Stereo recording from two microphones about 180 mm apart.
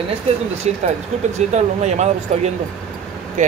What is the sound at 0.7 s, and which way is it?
Speech, 40° right (ahead or behind).